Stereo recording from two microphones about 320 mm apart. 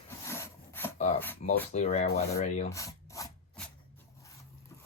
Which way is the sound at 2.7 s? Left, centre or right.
Centre.